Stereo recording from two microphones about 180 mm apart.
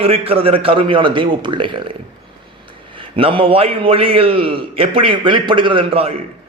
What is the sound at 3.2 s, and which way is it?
A man's voice, 30° right (ahead or behind).